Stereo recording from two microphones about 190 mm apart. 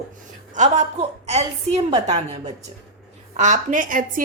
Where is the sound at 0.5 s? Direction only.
40° right (ahead or behind).